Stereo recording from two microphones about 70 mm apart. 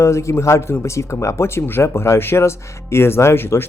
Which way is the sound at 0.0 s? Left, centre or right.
Left.